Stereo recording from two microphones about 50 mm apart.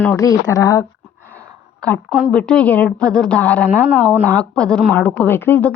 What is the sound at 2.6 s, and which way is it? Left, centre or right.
Speech, left.